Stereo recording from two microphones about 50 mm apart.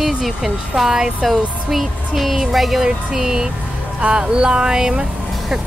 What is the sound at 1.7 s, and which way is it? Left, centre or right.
Music, centre.